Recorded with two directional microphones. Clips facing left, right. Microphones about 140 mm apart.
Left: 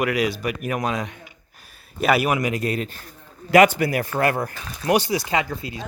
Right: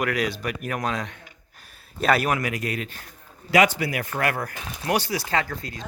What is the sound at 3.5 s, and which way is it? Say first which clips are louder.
Speech: left 5 dB; 50° left (ahead or behind).